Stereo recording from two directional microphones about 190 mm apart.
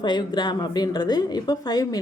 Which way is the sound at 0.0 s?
25° left (ahead or behind).